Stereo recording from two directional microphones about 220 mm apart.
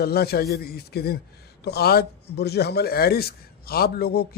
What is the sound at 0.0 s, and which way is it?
Speech, 45° left (ahead or behind).